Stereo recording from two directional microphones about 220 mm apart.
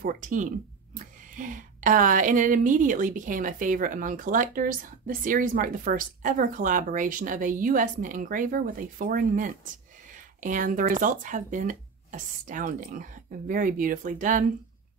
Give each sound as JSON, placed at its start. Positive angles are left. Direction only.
{"t": 0.0, "sound": "speech", "side_deg": -35}